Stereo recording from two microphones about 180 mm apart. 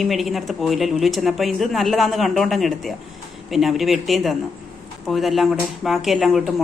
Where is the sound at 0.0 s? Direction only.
Centre (ahead or behind).